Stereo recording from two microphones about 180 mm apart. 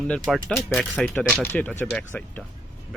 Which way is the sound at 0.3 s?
Centre (ahead or behind).